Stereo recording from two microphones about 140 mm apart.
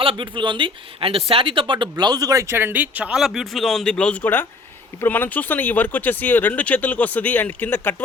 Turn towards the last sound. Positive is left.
turn(degrees=15)  # may be behind; listen again after turning